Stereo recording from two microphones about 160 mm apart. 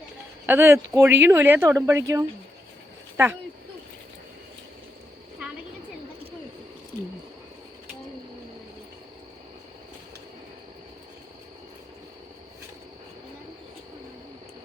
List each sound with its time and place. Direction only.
0.4 s speech: 15° right (ahead or behind)